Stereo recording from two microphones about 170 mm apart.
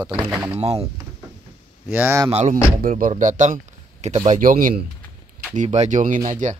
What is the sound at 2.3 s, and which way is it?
Speech, 40° right (ahead or behind).